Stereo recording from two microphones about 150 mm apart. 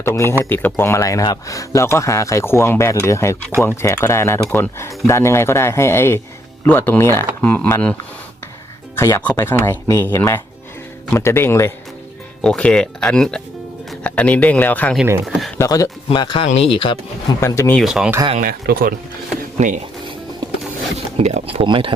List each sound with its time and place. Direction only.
0.0 s speech: 15° left (ahead or behind)
9.0 s speech: 15° left (ahead or behind)
15.0 s speech: 15° right (ahead or behind)
15.5 s speech: 20° left (ahead or behind)
16.0 s a man's voice: 35° left (ahead or behind)
17.4 s speech: 20° left (ahead or behind)
17.7 s speech: 5° right (ahead or behind)
18.3 s speech: 85° right
19.5 s speech: 55° right (ahead or behind)
20.4 s zipper: 30° right (ahead or behind)
21.2 s speech: 45° right (ahead or behind)